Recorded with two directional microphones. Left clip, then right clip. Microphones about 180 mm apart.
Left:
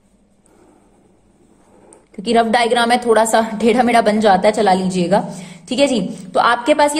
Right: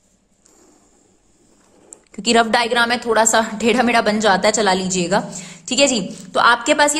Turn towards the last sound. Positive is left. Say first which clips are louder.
# left 1 dB
turn(degrees=-15)  # may be behind; listen again after turning